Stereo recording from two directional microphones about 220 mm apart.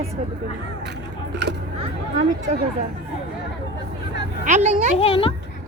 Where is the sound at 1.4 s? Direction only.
50° right (ahead or behind).